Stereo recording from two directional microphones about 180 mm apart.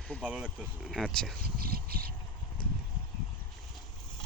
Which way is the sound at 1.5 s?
55° right (ahead or behind).